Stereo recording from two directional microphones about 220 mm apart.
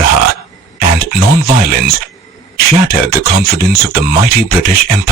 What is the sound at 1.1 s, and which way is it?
Speech, 45° right (ahead or behind).